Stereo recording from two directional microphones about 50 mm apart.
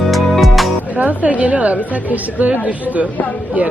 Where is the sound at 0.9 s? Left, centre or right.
Right.